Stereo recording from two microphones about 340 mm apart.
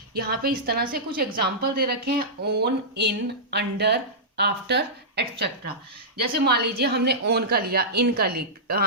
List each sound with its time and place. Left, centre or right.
0.1 s a woman's voice: right